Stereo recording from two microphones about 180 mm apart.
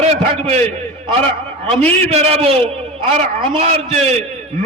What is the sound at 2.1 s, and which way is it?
A man's voice, 35° right (ahead or behind).